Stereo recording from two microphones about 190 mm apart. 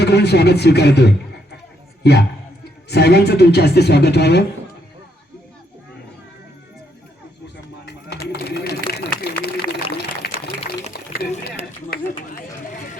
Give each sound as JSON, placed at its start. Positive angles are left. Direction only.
{"t": 0.0, "sound": "speech", "side_deg": 60}
{"t": 2.9, "sound": "speech", "side_deg": 60}
{"t": 7.9, "sound": "a sound", "side_deg": 60}